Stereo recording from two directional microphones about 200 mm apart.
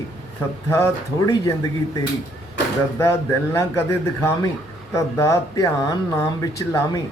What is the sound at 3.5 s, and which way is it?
Speech, 15° left (ahead or behind).